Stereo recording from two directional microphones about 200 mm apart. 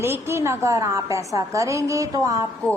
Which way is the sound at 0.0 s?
10° right (ahead or behind).